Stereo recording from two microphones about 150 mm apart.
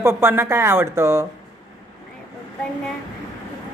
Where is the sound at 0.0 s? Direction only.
15° right (ahead or behind).